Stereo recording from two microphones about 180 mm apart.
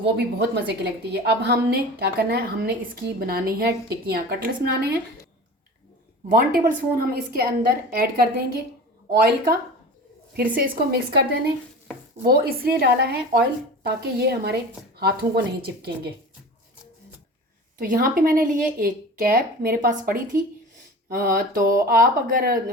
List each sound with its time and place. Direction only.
0.0 s a woman's voice: 65° right (ahead or behind)
6.3 s a woman's voice: 55° right (ahead or behind)
10.6 s a woman's voice: 60° right (ahead or behind)
17.7 s a woman's voice: 55° right (ahead or behind)